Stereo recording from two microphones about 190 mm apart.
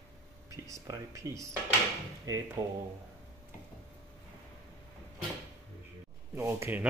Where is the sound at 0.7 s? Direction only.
15° right (ahead or behind).